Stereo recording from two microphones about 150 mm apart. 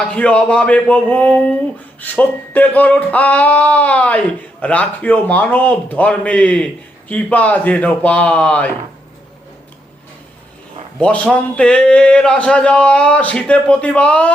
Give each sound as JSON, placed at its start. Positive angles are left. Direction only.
{"t": 0.0, "sound": "a man's voice", "side_deg": 5}
{"t": 11.0, "sound": "a man's voice", "side_deg": 5}